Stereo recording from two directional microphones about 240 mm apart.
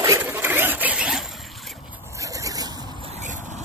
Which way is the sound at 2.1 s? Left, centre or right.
Centre.